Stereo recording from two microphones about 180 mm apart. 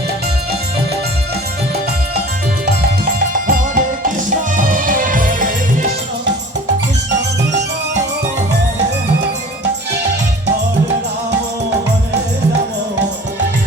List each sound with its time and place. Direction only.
3.4 s music: 50° right (ahead or behind)